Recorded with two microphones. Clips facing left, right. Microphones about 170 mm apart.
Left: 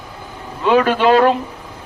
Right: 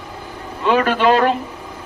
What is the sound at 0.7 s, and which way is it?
Speech, 45° right (ahead or behind).